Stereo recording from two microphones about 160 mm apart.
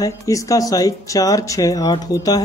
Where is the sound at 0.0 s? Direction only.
20° left (ahead or behind).